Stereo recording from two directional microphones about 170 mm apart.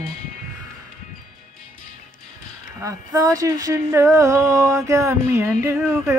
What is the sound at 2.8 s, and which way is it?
Speech, 20° right (ahead or behind).